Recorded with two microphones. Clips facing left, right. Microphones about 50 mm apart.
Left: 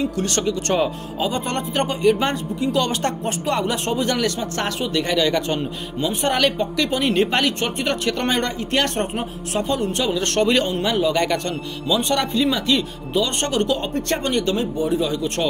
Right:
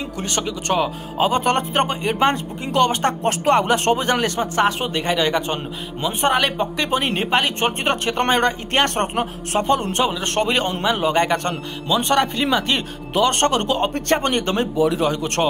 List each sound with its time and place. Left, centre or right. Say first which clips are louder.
0.2 s speech: left 3 dB; centre
1.2 s speech: right 5 dB; right
3.4 s a man's voice: right 6 dB; right
4.0 s a man's voice: right 1 dB; right
7.2 s speech: left 2 dB; centre
7.4 s speech: right 1 dB; right
10.2 s a man's voice: left 1 dB; right
13.1 s a man's voice: right 4 dB; right
14.9 s speech: right 1 dB; right